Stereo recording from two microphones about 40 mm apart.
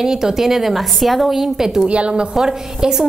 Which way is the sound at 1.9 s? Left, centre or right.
Right.